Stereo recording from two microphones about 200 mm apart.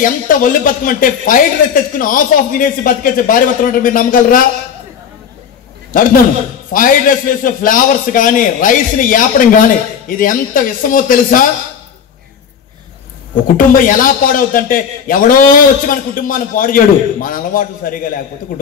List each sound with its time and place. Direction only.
0.0 s a man's voice: 45° left (ahead or behind)
6.7 s a man's voice: 45° left (ahead or behind)
13.6 s a man's voice: 45° left (ahead or behind)